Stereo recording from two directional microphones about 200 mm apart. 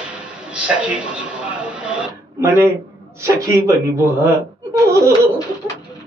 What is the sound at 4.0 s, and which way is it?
Speech, 15° right (ahead or behind).